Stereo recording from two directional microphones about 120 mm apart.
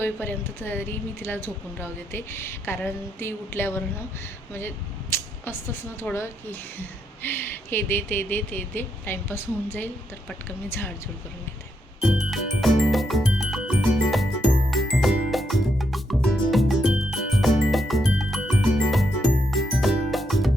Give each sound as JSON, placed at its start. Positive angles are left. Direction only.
{"t": 0.0, "sound": "speech", "side_deg": 15}
{"t": 5.1, "sound": "speech", "side_deg": 20}
{"t": 11.9, "sound": "music", "side_deg": -5}